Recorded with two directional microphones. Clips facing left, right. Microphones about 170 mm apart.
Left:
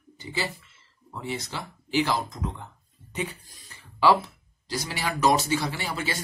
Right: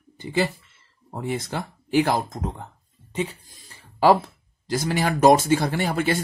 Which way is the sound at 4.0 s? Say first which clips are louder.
Right 4 dB; 50° right (ahead or behind).